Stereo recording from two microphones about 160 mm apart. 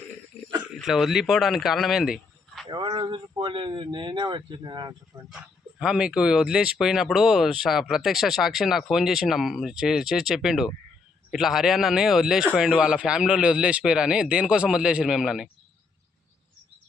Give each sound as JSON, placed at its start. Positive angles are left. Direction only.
{"t": 0.3, "sound": "a sound", "side_deg": 5}
{"t": 0.8, "sound": "speech", "side_deg": 0}
{"t": 2.6, "sound": "speech", "side_deg": -30}
{"t": 5.3, "sound": "speech", "side_deg": -5}